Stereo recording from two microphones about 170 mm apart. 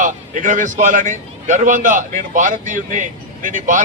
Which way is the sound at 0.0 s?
50° right (ahead or behind).